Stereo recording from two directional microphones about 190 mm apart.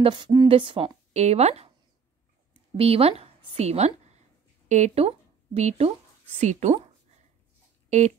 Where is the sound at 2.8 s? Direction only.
30° right (ahead or behind).